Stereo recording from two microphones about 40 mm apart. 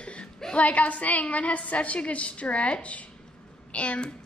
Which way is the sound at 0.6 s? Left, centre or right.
Left.